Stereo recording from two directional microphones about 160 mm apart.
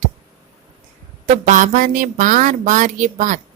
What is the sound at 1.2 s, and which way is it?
Speech, 50° right (ahead or behind).